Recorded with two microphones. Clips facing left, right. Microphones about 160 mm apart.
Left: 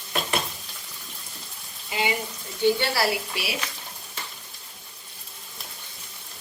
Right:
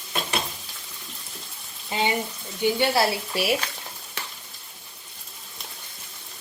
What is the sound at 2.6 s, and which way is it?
Speech, 20° right (ahead or behind).